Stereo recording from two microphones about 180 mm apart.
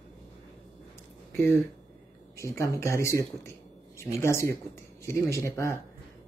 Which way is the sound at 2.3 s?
15° left (ahead or behind).